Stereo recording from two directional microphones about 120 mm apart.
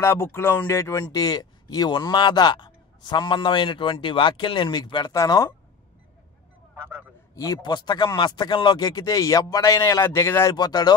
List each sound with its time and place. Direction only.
0.0 s a man's voice: 20° left (ahead or behind)
6.8 s a man's voice: 20° right (ahead or behind)
7.3 s a man's voice: 30° left (ahead or behind)
10.5 s a man's voice: 35° left (ahead or behind)